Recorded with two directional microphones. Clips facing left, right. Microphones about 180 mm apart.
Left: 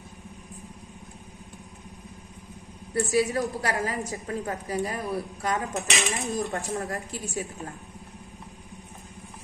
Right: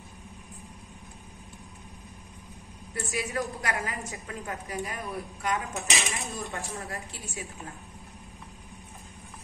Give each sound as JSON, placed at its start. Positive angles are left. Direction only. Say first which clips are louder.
{"t": 2.9, "sound": "a woman's voice", "louder": "left 9 dB", "side_deg": 35}
{"t": 5.8, "sound": "speech", "louder": "left 3 dB", "side_deg": 0}
{"t": 6.5, "sound": "a woman's voice", "louder": "left 6 dB", "side_deg": 40}